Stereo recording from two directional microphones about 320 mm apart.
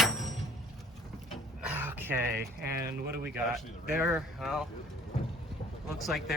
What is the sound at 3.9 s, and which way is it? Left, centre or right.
Speech, centre.